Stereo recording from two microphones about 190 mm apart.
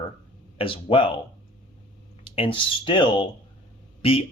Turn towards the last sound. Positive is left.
turn(degrees=30)  # may be behind; listen again after turning